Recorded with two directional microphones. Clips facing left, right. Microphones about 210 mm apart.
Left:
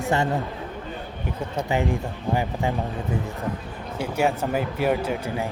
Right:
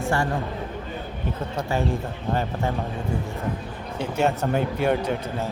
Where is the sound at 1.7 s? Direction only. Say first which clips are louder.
Left 1 dB; 15° left (ahead or behind).